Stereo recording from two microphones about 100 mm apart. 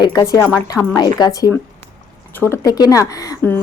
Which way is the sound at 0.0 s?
40° left (ahead or behind).